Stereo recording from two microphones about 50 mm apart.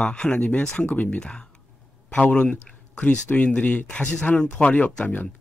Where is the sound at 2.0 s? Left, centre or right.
Left.